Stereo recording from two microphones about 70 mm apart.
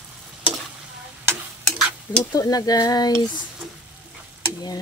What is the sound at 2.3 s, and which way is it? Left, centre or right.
Stir, left.